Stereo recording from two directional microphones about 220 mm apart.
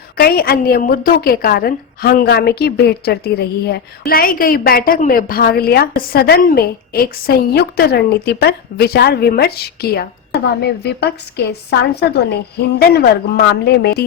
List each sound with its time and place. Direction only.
0.2 s a woman's voice: 45° left (ahead or behind)